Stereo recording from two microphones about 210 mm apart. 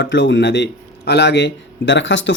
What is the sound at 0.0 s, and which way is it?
Speech, 55° left (ahead or behind).